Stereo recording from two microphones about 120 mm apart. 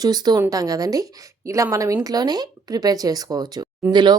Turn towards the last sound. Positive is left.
turn(degrees=-35)  # may be behind; listen again after turning